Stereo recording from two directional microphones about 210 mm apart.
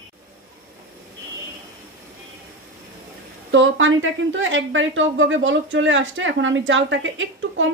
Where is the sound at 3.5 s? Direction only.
65° right (ahead or behind).